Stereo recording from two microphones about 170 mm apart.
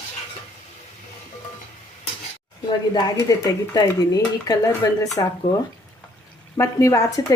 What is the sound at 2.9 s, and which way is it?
Speech, 20° left (ahead or behind).